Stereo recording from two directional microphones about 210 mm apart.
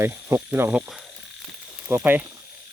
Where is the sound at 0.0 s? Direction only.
10° right (ahead or behind).